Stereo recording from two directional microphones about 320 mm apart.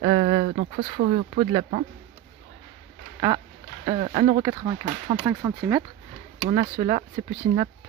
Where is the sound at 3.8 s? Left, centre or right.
Centre.